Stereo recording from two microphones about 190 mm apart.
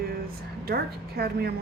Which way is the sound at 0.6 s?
55° right (ahead or behind).